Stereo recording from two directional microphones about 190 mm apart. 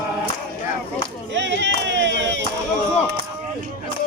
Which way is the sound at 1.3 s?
70° right (ahead or behind).